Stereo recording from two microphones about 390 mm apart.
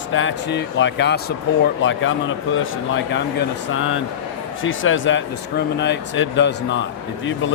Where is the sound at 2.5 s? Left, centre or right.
Left.